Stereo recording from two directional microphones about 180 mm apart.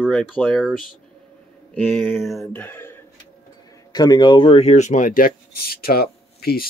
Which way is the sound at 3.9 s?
20° left (ahead or behind).